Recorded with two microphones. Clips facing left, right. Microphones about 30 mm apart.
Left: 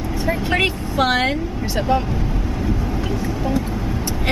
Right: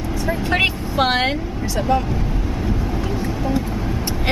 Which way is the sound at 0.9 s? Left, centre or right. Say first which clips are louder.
Left 1 dB; centre.